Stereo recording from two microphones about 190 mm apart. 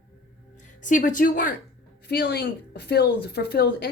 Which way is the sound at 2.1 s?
55° left (ahead or behind).